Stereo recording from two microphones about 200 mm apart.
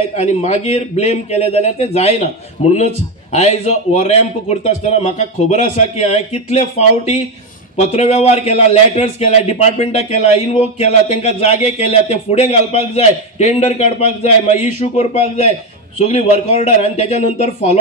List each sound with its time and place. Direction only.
0.1 s a man's voice: 35° left (ahead or behind)
7.7 s a man's voice: 30° left (ahead or behind)